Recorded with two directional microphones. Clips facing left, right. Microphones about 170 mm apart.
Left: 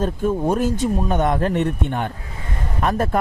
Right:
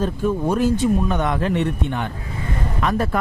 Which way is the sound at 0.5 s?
45° left (ahead or behind).